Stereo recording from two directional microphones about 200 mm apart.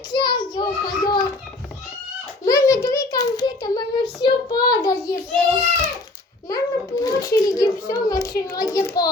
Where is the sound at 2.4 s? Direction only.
15° left (ahead or behind).